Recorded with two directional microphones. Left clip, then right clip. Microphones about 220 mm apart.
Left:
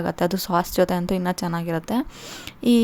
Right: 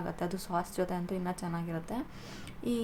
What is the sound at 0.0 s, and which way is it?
A woman's voice, 40° left (ahead or behind).